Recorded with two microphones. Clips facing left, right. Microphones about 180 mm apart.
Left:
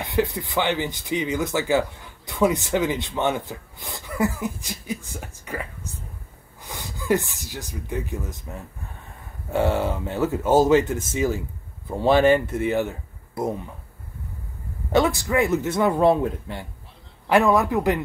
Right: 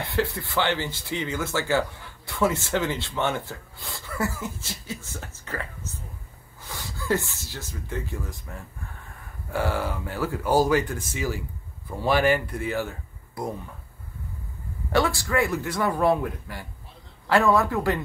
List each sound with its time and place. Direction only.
0.0 s speech: 15° left (ahead or behind)
14.9 s speech: 20° left (ahead or behind)